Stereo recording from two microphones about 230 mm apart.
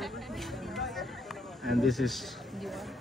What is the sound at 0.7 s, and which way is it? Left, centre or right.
Music, centre.